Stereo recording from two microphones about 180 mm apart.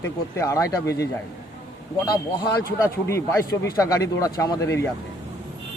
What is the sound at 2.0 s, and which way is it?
Speech, 20° left (ahead or behind).